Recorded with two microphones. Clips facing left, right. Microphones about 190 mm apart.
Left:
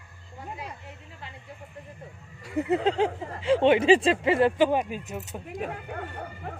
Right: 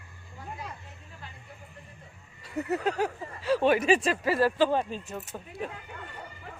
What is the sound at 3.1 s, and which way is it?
Speech, 70° left (ahead or behind).